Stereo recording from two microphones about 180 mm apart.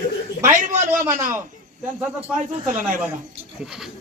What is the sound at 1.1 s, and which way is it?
Speech, 15° right (ahead or behind).